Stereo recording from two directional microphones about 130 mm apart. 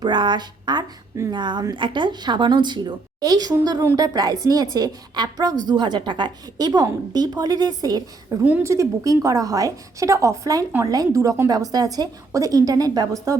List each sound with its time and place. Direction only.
0.0 s a woman's voice: 35° right (ahead or behind)
8.4 s a woman's voice: 10° right (ahead or behind)
8.7 s a woman's voice: 25° right (ahead or behind)